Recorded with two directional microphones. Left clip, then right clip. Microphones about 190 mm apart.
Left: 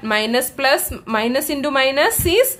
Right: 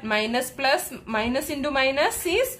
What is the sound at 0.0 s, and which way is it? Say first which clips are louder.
A woman's voice: left 6 dB; 30° left (ahead or behind).